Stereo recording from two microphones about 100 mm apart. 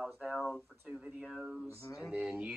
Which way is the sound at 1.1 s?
10° right (ahead or behind).